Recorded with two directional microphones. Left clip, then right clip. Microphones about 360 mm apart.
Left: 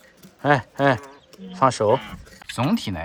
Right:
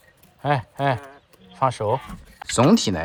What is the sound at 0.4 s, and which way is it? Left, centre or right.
Speech, centre.